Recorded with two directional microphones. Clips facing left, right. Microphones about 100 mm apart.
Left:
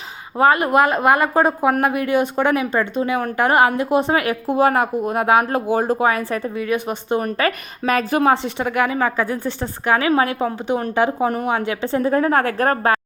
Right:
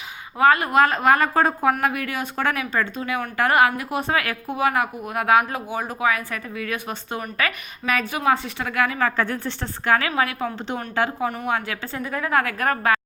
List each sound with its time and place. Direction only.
0.3 s speech: 25° left (ahead or behind)
4.5 s a woman's voice: 35° left (ahead or behind)
5.7 s a woman's voice: 35° left (ahead or behind)
8.5 s a woman's voice: 20° left (ahead or behind)
10.1 s speech: 30° left (ahead or behind)
10.9 s a woman's voice: 20° left (ahead or behind); by 13.0 s 35° left (ahead or behind)